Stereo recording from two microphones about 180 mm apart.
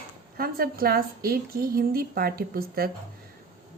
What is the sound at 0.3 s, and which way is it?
Speech, 55° right (ahead or behind).